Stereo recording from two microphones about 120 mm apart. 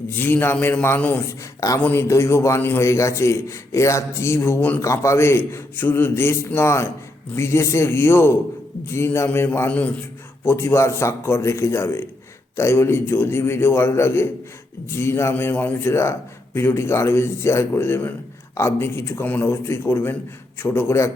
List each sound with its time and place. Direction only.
0.1 s a man's voice: 15° left (ahead or behind)